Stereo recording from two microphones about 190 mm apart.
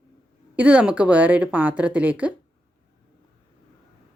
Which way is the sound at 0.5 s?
10° right (ahead or behind).